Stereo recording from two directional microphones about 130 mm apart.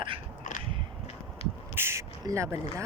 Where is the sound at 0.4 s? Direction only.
90° left.